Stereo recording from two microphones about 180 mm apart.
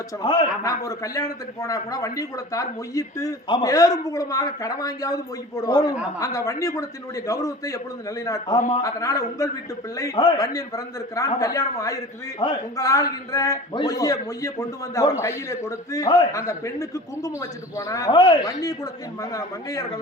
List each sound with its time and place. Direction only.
0.2 s a man's voice: 25° left (ahead or behind)